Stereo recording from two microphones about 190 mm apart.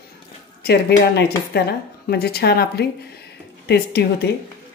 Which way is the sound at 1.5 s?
55° left (ahead or behind).